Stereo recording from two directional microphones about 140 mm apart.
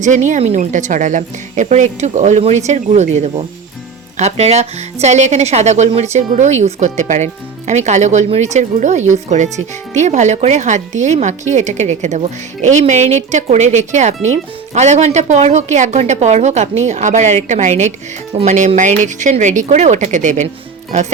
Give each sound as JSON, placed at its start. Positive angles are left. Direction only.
{"t": 0.0, "sound": "speech", "side_deg": -60}